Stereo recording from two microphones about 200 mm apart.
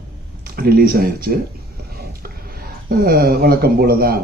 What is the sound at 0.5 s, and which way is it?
Speech, 50° right (ahead or behind).